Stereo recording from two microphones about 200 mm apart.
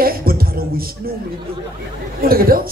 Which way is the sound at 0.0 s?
50° right (ahead or behind).